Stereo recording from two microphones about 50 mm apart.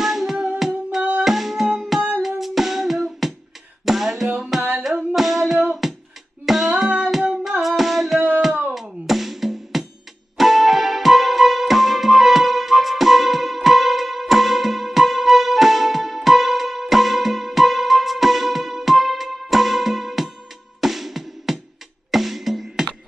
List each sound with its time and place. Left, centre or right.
0.0 s music: centre
5.8 s a sound: centre
6.4 s music: centre